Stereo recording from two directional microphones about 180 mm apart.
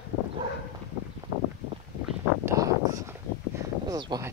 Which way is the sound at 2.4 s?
15° right (ahead or behind).